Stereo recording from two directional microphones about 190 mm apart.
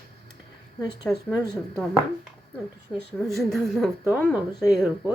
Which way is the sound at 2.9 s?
Centre (ahead or behind).